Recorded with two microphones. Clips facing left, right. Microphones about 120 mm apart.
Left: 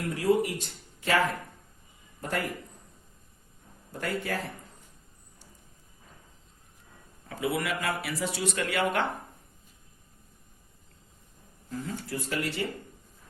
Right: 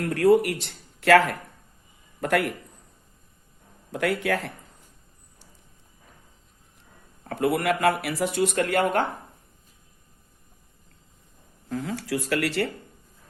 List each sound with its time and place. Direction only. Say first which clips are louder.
0.1 s speech: right 6 dB; 70° right (ahead or behind)
3.9 s speech: right 7 dB; 75° right (ahead or behind)
7.3 s speech: right 7 dB; 60° right (ahead or behind)
11.7 s speech: right 6 dB; 80° right